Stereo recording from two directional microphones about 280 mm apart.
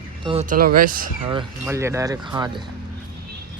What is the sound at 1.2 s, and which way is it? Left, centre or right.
Speech, centre.